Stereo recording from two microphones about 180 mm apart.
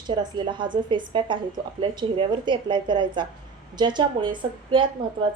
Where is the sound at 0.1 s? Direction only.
25° right (ahead or behind).